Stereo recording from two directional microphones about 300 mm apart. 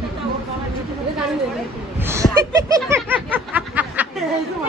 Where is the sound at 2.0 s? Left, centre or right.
Centre.